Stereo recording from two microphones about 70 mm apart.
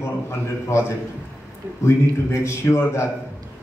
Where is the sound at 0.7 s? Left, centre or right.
Left.